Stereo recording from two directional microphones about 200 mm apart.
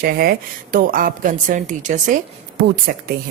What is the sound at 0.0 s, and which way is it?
Speech, 50° right (ahead or behind).